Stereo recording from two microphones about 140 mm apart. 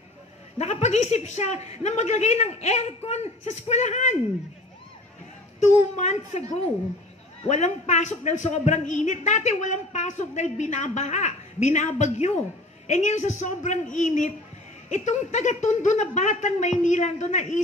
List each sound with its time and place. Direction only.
0.6 s speech: 50° left (ahead or behind)
5.6 s a man's voice: 55° left (ahead or behind)